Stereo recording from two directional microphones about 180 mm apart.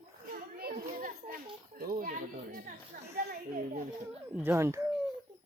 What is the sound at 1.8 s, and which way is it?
Speech, 50° right (ahead or behind).